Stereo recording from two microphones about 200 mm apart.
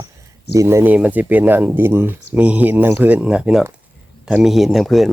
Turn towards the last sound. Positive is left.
turn(degrees=0)  # may be behind; listen again after turning